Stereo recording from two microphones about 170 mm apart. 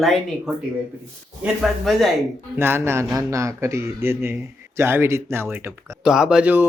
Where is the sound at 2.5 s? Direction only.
15° right (ahead or behind).